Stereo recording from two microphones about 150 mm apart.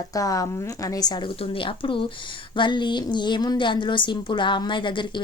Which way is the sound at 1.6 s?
35° left (ahead or behind).